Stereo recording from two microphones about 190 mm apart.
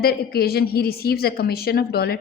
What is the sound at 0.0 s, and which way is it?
A woman's voice, 55° left (ahead or behind).